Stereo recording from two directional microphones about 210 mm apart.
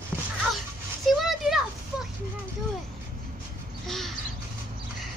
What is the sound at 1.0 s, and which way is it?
Speech, centre (ahead or behind).